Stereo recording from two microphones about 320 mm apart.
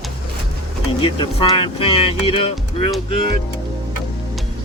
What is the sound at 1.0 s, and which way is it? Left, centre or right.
Speech, centre.